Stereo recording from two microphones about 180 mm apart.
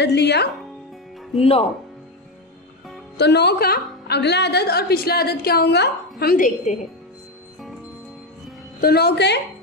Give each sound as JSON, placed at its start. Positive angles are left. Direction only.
{"t": 0.0, "sound": "speech", "side_deg": 70}
{"t": 1.4, "sound": "speech", "side_deg": 35}
{"t": 3.2, "sound": "a woman's voice", "side_deg": 65}
{"t": 8.8, "sound": "a woman's voice", "side_deg": 60}